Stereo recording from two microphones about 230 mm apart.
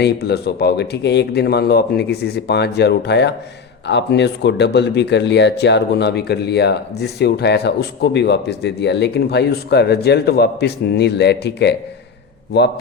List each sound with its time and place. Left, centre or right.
0.0 s speech: left